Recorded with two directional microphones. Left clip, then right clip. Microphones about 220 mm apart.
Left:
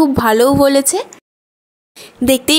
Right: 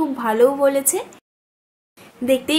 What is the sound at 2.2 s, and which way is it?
Speech, 50° left (ahead or behind).